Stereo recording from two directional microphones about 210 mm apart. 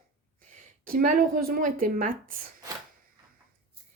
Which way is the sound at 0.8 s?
45° right (ahead or behind).